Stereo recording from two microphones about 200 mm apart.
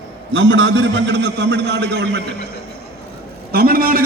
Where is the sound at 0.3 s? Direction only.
65° right (ahead or behind).